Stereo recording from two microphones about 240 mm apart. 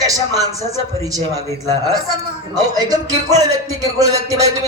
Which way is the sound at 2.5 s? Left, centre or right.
Centre.